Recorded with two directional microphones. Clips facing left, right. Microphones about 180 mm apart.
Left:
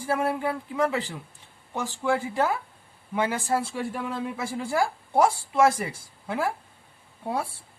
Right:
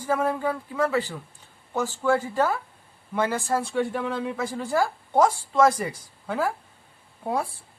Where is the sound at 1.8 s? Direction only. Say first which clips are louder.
Right 2 dB; 10° left (ahead or behind).